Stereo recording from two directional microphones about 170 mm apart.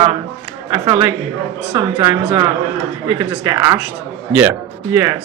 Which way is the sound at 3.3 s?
15° right (ahead or behind).